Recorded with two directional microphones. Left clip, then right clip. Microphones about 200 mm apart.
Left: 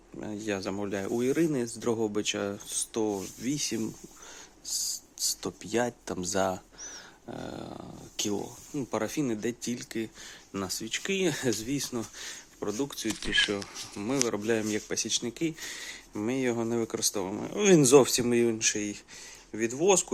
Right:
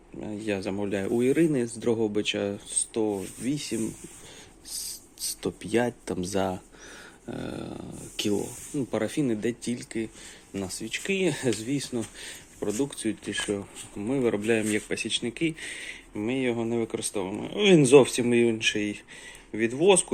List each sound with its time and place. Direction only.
0.2 s speech: 15° left (ahead or behind)
2.7 s speech: 15° left (ahead or behind)
4.7 s speech: centre (ahead or behind)